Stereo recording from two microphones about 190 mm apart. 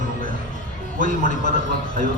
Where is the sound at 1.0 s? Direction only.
40° left (ahead or behind).